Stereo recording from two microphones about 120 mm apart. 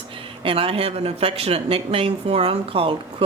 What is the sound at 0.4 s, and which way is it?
A woman's voice, 50° right (ahead or behind).